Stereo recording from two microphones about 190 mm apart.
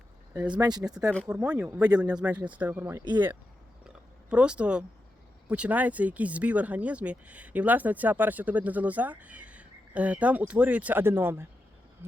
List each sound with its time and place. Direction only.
0.6 s speech: 20° right (ahead or behind)
1.1 s speech: 5° left (ahead or behind)
1.4 s speech: 10° right (ahead or behind)
3.8 s a sound: 5° right (ahead or behind)
5.5 s speech: 5° right (ahead or behind)